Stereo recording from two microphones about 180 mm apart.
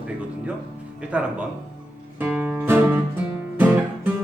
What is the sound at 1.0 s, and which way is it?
Speech, 5° right (ahead or behind).